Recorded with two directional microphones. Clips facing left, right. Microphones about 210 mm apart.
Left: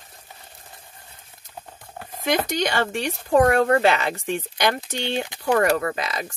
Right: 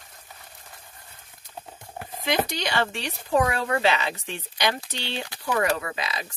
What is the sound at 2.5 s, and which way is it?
Speech, 45° left (ahead or behind).